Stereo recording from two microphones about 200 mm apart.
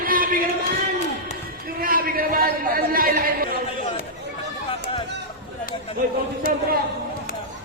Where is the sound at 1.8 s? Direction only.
45° right (ahead or behind).